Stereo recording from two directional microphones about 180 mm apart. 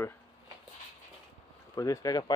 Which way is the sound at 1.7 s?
15° left (ahead or behind).